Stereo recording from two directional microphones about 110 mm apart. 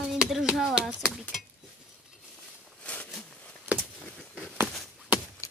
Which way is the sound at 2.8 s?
15° left (ahead or behind).